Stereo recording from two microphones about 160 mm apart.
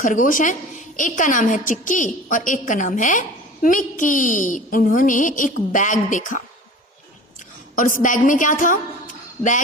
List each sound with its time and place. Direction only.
0.0 s a woman's voice: 55° left (ahead or behind)
7.8 s a woman's voice: 55° left (ahead or behind)